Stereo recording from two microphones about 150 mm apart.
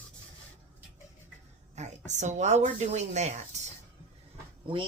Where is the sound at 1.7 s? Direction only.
50° right (ahead or behind).